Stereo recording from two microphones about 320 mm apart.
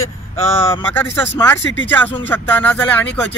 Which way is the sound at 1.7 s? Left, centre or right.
Left.